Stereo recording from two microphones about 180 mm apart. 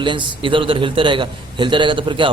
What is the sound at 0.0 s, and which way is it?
A man's voice, 25° right (ahead or behind).